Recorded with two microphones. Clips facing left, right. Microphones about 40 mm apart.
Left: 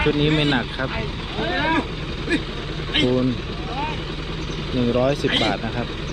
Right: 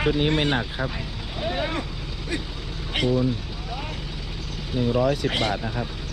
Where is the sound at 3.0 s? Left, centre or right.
Left.